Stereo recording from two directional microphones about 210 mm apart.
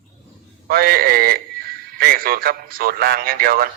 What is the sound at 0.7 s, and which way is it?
A man's voice, 45° right (ahead or behind).